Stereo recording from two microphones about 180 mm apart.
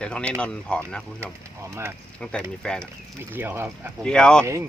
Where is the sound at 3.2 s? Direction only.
10° right (ahead or behind).